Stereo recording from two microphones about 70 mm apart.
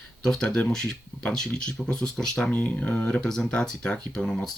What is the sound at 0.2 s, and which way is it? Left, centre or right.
Speech, centre.